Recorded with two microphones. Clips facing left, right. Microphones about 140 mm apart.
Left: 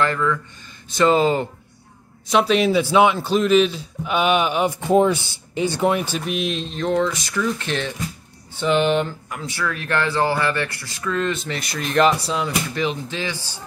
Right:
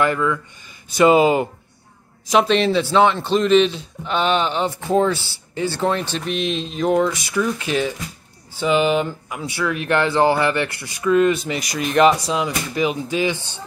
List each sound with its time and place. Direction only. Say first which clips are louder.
0.0 s speech: right 2 dB; 10° right (ahead or behind)
2.2 s a man's voice: right 1 dB; 5° left (ahead or behind); by 13.6 s 20° right (ahead or behind)